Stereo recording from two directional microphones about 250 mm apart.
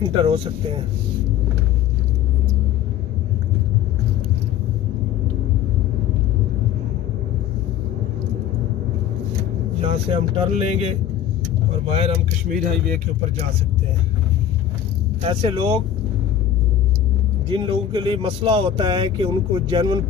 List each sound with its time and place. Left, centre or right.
0.2 s speech: centre
9.8 s speech: right
11.9 s speech: right
15.2 s speech: centre
17.5 s speech: centre